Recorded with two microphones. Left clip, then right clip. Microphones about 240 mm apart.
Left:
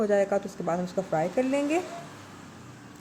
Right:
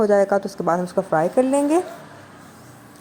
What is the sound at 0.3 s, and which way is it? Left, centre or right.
Speech, centre.